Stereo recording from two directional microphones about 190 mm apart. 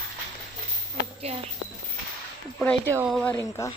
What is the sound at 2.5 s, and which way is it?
Speech, 5° left (ahead or behind).